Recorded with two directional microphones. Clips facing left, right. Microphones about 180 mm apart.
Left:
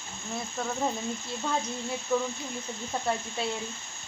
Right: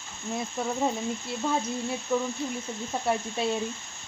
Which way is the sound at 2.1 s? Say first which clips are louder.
Right 1 dB; centre (ahead or behind).